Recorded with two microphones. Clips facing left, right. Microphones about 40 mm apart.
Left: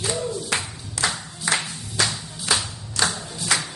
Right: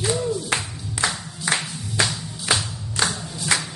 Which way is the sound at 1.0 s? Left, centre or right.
Right.